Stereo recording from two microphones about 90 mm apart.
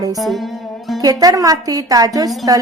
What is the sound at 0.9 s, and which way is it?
A woman's voice, 45° right (ahead or behind).